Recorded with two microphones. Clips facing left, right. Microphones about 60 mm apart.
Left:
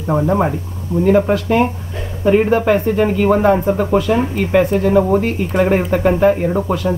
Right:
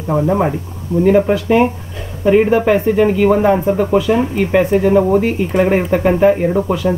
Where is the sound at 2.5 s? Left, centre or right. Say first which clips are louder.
Right 2 dB; centre.